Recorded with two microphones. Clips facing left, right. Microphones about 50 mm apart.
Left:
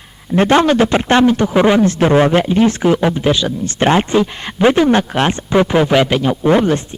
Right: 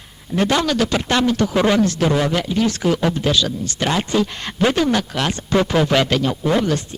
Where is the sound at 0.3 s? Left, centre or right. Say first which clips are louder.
Left 7 dB; left.